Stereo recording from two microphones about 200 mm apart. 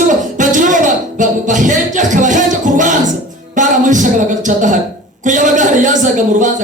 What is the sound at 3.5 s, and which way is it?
A man's voice, 40° right (ahead or behind).